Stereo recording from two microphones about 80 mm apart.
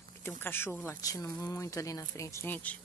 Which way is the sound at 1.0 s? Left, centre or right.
Left.